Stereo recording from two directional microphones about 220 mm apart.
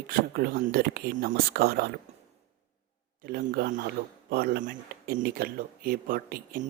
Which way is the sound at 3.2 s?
40° right (ahead or behind).